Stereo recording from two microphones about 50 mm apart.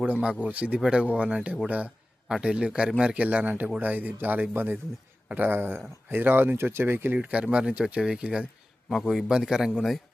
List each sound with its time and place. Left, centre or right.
0.0 s speech: right
2.2 s a man's voice: centre; by 6.6 s right
6.6 s speech: right
7.2 s a man's voice: right